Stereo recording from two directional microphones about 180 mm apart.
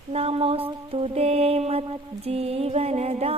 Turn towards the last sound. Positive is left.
turn(degrees=-35)  # may be behind; listen again after turning